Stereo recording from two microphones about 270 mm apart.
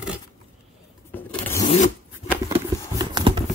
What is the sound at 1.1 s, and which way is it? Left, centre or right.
Vehicle, centre.